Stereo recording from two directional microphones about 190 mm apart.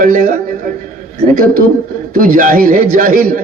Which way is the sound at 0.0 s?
45° right (ahead or behind).